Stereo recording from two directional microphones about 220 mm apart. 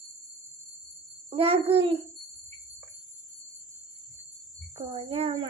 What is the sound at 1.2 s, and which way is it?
Speech, 25° right (ahead or behind).